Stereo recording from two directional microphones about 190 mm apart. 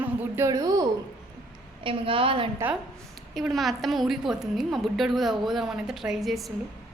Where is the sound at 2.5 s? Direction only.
10° right (ahead or behind).